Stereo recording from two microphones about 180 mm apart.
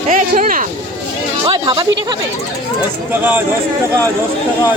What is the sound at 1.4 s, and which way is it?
Music, 25° right (ahead or behind).